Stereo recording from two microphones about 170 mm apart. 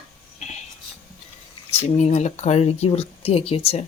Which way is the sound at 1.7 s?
40° left (ahead or behind).